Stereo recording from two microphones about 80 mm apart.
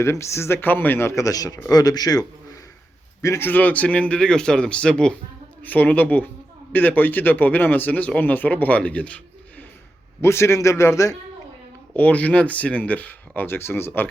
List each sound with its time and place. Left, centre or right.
0.0 s speech: left
3.2 s speech: left; by 9.6 s centre
10.2 s speech: left
11.9 s speech: centre